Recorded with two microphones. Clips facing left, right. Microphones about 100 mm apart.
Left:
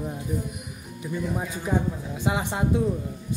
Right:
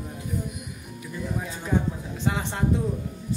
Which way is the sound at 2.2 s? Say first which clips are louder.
Left 1 dB; 15° left (ahead or behind).